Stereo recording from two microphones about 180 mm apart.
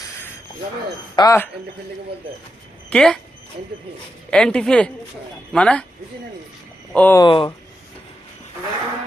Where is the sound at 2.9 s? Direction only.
5° left (ahead or behind).